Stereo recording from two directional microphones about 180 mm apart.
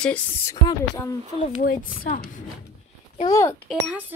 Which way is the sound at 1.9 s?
50° left (ahead or behind).